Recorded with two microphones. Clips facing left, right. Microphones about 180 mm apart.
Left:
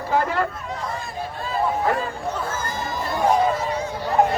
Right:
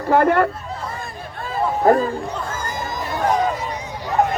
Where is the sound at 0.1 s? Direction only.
60° right (ahead or behind).